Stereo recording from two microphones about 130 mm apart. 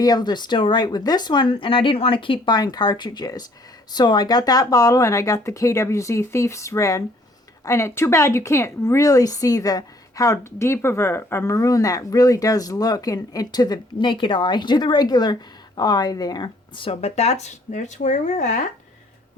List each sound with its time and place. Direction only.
0.0 s a woman's voice: 30° left (ahead or behind); by 18.7 s 70° left (ahead or behind)